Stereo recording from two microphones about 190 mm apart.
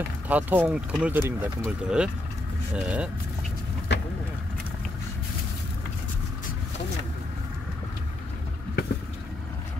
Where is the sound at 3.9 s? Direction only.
65° left (ahead or behind).